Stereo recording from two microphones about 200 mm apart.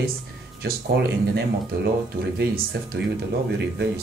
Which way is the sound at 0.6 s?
55° right (ahead or behind).